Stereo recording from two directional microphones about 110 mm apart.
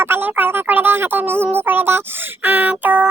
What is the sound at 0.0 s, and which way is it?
Speech, 20° right (ahead or behind).